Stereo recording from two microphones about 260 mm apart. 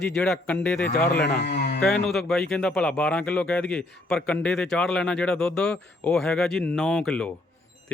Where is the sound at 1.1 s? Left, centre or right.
Left.